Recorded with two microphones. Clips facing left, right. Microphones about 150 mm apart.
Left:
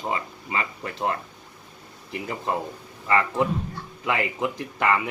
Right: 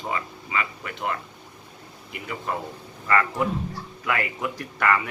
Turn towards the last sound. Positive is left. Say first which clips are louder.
# even
turn(degrees=20)  # may be behind; listen again after turning